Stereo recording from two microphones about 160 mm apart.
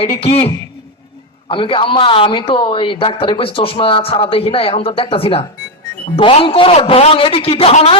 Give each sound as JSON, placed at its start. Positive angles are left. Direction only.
{"t": 0.0, "sound": "a man's voice", "side_deg": 40}